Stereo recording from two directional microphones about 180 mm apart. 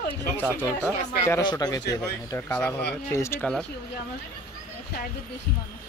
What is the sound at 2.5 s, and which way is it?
Speech, 10° left (ahead or behind).